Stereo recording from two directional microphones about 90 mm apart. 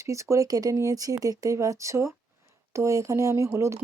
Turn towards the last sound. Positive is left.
turn(degrees=-35)  # may be behind; listen again after turning